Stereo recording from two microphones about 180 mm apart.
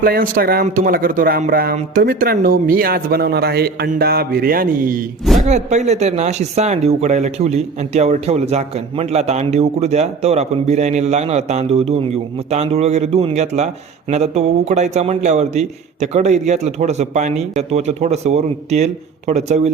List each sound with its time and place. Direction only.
0.0 s speech: 55° right (ahead or behind)
5.4 s speech: 40° right (ahead or behind)